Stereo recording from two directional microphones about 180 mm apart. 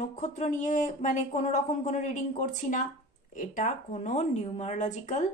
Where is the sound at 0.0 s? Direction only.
45° left (ahead or behind).